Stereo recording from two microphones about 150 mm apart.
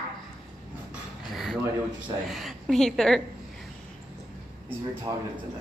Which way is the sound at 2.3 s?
Centre (ahead or behind).